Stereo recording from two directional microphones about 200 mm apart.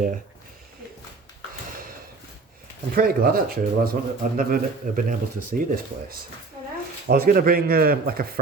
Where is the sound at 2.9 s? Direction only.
45° right (ahead or behind).